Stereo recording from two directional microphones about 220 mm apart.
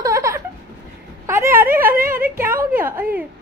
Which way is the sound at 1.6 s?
40° right (ahead or behind).